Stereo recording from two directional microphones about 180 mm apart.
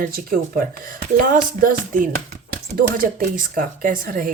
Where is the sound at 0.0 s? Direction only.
55° right (ahead or behind).